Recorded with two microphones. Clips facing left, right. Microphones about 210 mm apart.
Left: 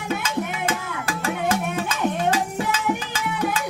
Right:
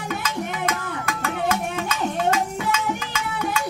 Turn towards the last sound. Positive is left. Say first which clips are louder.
# left 2 dB
turn(degrees=35)  # may be behind; listen again after turning